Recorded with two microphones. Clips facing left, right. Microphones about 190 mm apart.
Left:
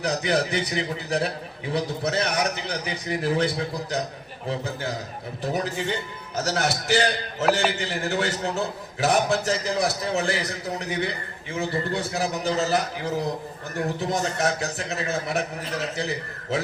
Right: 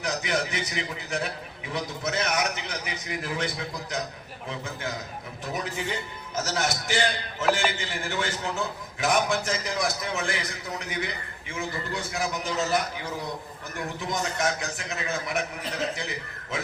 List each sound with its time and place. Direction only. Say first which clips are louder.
0.0 s a man's voice: left 5 dB; 35° left (ahead or behind)